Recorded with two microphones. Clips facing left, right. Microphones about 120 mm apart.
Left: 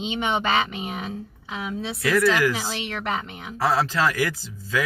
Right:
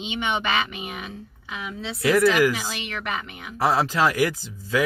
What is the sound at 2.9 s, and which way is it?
Speech, 30° left (ahead or behind).